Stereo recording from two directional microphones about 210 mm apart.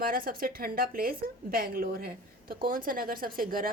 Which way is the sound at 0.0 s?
45° right (ahead or behind).